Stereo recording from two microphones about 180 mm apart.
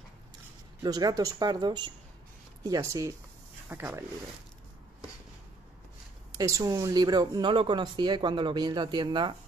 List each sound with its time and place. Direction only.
0.8 s speech: 20° right (ahead or behind)
6.3 s speech: 20° right (ahead or behind)